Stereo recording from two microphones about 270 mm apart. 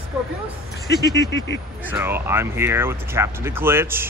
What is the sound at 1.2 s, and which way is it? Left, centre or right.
Speech, left.